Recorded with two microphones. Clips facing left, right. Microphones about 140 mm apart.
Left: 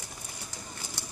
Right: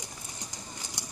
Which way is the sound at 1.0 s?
15° right (ahead or behind).